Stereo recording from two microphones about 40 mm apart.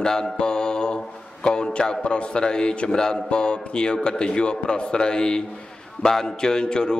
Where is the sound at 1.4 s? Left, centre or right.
Left.